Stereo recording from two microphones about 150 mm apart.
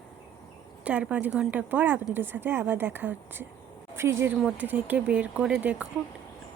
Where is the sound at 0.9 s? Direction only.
10° right (ahead or behind).